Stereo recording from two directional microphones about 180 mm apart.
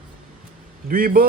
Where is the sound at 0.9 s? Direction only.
55° right (ahead or behind).